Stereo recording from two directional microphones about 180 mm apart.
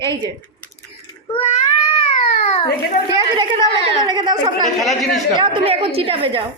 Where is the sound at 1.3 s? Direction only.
30° left (ahead or behind).